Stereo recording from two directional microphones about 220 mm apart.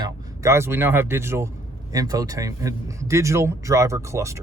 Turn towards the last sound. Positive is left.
turn(degrees=-15)  # may be behind; listen again after turning